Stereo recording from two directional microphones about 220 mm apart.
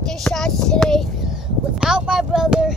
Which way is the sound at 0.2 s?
Centre (ahead or behind).